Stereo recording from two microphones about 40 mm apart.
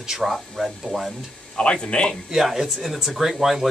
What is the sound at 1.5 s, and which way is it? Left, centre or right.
Speech, left.